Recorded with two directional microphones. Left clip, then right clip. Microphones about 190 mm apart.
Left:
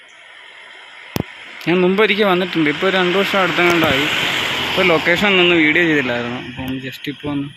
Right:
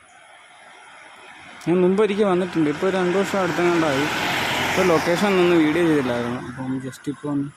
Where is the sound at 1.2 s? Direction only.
60° right (ahead or behind).